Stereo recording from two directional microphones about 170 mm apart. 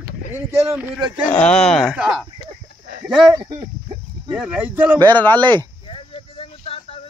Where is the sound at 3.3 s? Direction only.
25° right (ahead or behind).